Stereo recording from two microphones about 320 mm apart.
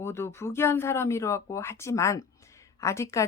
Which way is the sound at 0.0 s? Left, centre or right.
Centre.